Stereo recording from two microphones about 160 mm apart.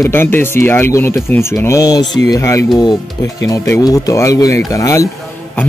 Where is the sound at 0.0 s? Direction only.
15° left (ahead or behind).